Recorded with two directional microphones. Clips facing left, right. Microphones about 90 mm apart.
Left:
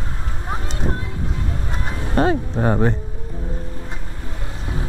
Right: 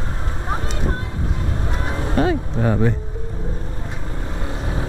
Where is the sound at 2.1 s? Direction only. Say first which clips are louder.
Left 2 dB; 40° left (ahead or behind).